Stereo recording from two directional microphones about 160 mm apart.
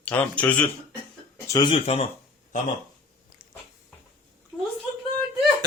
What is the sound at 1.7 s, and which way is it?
Speech, 40° left (ahead or behind).